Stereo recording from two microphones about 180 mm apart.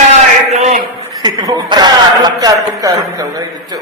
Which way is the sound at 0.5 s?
40° right (ahead or behind).